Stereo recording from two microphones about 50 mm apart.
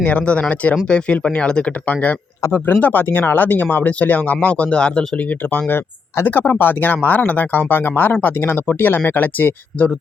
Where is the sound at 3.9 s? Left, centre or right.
Left.